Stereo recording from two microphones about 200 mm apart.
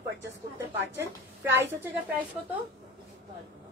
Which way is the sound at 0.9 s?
10° right (ahead or behind).